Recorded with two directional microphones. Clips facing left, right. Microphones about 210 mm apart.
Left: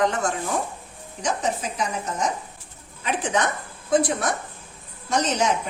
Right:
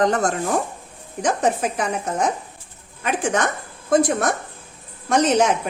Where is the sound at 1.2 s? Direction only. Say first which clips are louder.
Right 6 dB; 55° right (ahead or behind).